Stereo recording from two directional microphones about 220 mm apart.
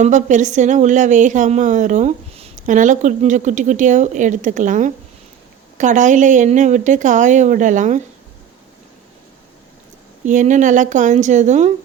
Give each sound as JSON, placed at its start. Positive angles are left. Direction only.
{"t": 0.0, "sound": "speech", "side_deg": -35}
{"t": 10.2, "sound": "speech", "side_deg": -35}